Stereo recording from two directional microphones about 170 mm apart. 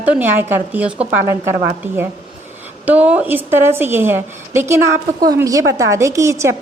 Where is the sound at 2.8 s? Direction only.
10° right (ahead or behind).